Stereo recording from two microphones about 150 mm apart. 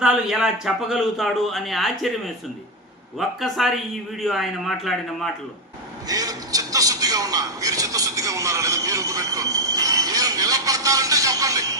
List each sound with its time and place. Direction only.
0.0 s a man's voice: 5° right (ahead or behind)
3.2 s a man's voice: centre (ahead or behind)
6.1 s a man's voice: 25° right (ahead or behind)